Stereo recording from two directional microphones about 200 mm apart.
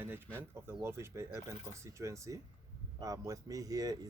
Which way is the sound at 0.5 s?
15° right (ahead or behind).